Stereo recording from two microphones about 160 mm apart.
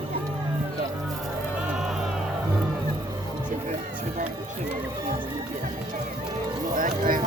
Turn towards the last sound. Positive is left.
turn(degrees=-60)  # may be behind; listen again after turning